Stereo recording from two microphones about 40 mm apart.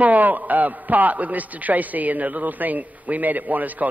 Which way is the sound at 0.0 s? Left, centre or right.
Right.